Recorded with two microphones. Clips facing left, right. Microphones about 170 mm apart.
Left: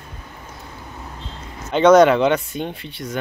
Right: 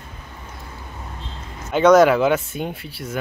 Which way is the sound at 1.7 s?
Centre (ahead or behind).